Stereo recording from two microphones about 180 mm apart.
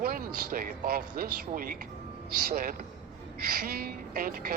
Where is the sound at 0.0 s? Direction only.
55° right (ahead or behind).